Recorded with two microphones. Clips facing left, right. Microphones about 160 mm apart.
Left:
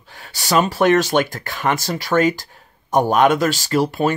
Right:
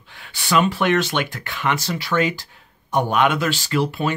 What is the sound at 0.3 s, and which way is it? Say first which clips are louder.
Speech: left 1 dB; 40° left (ahead or behind).